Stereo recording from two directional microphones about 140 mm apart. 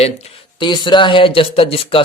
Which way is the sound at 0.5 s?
35° left (ahead or behind).